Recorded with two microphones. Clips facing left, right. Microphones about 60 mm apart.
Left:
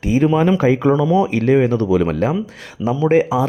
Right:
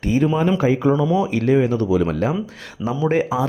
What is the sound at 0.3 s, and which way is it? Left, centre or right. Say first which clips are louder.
Speech: left 3 dB; left.